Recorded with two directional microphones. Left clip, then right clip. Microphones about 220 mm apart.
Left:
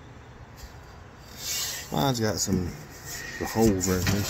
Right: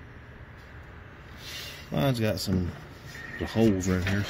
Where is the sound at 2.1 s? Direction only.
10° right (ahead or behind).